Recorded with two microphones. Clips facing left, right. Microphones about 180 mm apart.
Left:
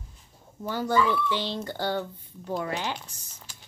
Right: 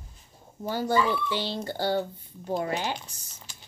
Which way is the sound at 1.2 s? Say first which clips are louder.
Left 1 dB; 10° right (ahead or behind).